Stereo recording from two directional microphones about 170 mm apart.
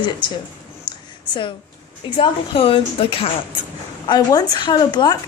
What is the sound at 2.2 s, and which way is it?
Speech, 35° left (ahead or behind).